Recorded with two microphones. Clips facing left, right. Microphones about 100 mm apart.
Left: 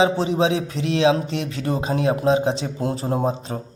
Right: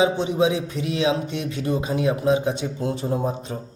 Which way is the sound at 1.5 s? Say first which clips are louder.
Even; 35° left (ahead or behind).